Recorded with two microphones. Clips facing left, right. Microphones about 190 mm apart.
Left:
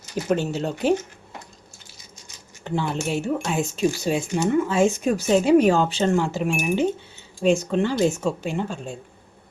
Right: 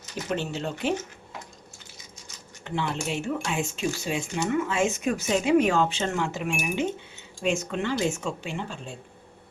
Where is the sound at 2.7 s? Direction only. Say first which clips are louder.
Left 4 dB; 40° left (ahead or behind).